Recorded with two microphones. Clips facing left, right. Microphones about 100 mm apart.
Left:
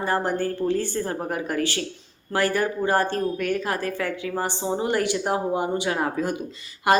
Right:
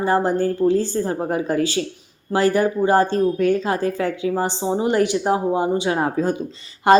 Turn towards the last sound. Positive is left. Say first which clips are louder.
# right 6 dB
turn(degrees=-25)  # may be behind; listen again after turning